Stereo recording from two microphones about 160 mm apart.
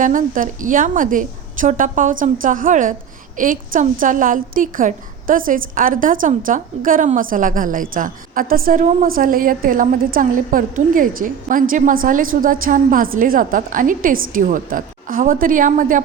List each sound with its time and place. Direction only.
0.0 s a woman's voice: 55° right (ahead or behind)